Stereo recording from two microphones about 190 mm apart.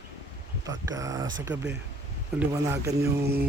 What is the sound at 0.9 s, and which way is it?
A man's voice, 15° right (ahead or behind).